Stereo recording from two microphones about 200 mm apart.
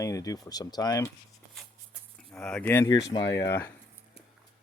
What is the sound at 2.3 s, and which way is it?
Speech, 5° left (ahead or behind).